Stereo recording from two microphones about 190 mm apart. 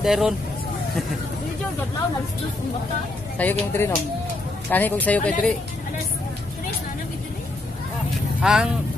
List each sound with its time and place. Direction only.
0.0 s speech: centre (ahead or behind)
3.3 s speech: 10° left (ahead or behind)
8.4 s speech: 5° right (ahead or behind)